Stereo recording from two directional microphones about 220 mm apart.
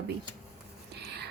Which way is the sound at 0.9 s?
50° right (ahead or behind).